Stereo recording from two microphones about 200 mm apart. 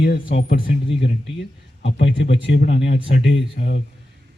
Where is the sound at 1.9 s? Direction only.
60° left (ahead or behind).